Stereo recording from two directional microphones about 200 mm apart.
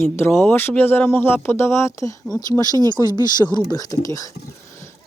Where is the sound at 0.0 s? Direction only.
10° left (ahead or behind).